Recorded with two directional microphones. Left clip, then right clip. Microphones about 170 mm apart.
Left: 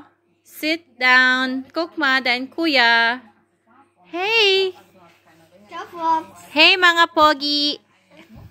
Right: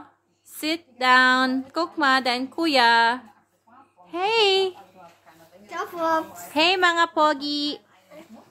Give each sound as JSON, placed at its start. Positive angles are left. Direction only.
{"t": 0.5, "sound": "a woman's voice", "side_deg": 0}
{"t": 5.7, "sound": "a child's voice", "side_deg": -20}
{"t": 6.5, "sound": "speech", "side_deg": 10}